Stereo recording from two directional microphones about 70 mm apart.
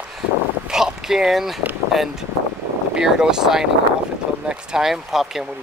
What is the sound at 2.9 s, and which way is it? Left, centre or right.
Speech, centre.